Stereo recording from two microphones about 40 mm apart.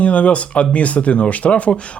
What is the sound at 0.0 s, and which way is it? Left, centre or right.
Speech, left.